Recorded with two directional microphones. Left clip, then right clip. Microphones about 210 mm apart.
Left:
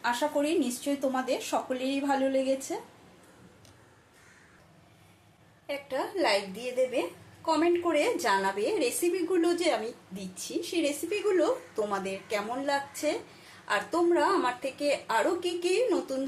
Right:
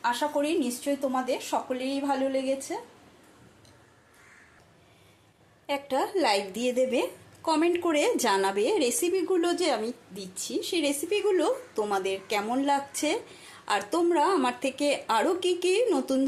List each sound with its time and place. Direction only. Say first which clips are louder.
0.0 s speech: right 1 dB; 10° right (ahead or behind)
5.6 s a woman's voice: right 5 dB; 35° right (ahead or behind)